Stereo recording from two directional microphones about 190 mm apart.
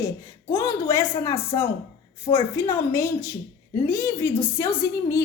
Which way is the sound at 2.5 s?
15° left (ahead or behind).